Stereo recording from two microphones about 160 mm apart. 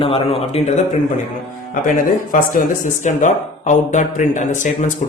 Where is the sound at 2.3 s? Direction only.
55° left (ahead or behind).